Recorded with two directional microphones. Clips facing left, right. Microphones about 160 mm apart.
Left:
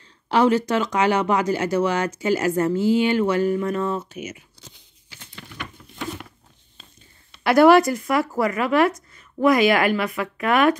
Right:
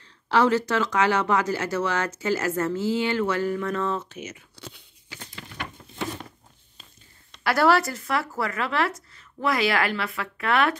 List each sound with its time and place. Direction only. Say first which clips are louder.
0.3 s speech: left 3 dB; 15° left (ahead or behind)
4.6 s crunch: right 7 dB; 65° right (ahead or behind)
7.4 s speech: left 7 dB; 15° left (ahead or behind)